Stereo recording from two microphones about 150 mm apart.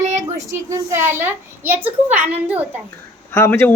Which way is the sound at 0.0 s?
50° right (ahead or behind).